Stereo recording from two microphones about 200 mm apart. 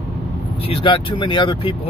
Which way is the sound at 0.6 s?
25° left (ahead or behind).